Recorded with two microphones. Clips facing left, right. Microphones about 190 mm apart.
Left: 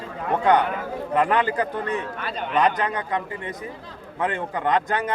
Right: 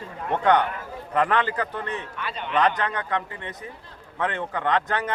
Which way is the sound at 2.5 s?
10° left (ahead or behind).